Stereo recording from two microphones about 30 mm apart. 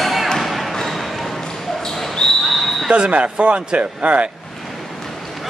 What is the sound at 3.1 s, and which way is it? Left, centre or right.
A man's voice, right.